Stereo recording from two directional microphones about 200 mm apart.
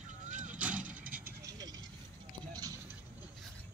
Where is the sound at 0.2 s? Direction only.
40° right (ahead or behind).